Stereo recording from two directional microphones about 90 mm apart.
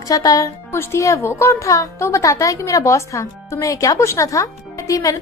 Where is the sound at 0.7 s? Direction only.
30° left (ahead or behind).